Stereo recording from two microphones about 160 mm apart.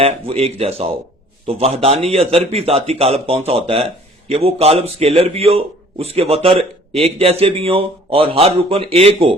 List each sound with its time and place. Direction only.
0.0 s speech: 40° right (ahead or behind)